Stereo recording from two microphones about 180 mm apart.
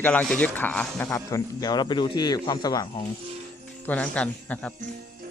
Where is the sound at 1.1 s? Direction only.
20° left (ahead or behind).